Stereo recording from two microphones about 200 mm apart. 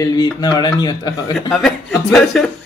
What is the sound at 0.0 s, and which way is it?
Speech, 20° left (ahead or behind).